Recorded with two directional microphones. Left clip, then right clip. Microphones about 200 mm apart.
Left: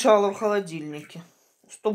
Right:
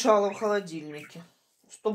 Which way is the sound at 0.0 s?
45° left (ahead or behind).